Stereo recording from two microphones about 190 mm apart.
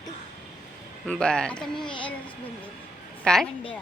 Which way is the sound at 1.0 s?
5° left (ahead or behind).